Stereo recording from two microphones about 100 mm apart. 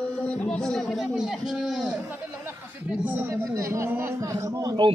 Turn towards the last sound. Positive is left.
turn(degrees=-35)  # may be behind; listen again after turning